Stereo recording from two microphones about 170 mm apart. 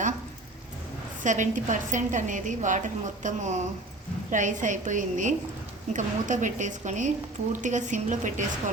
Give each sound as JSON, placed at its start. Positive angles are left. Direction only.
{"t": 1.2, "sound": "a woman's voice", "side_deg": -50}